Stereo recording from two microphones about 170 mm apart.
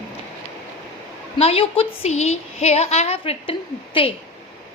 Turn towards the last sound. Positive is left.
turn(degrees=30)  # may be behind; listen again after turning